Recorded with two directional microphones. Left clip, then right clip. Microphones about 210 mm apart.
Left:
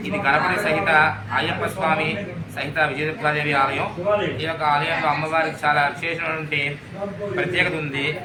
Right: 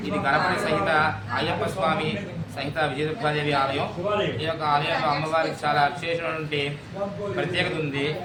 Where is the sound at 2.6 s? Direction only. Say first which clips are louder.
Left 4 dB; 10° right (ahead or behind).